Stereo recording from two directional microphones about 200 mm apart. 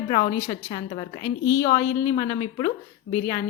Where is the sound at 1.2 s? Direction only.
15° left (ahead or behind).